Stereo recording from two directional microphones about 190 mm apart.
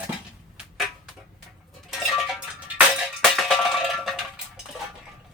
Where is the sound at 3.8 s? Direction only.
Centre (ahead or behind).